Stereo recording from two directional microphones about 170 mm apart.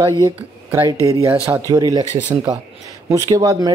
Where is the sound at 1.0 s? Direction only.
15° right (ahead or behind).